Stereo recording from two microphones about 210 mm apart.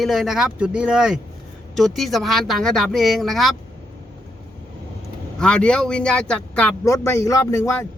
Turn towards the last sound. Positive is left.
turn(degrees=15)  # may be behind; listen again after turning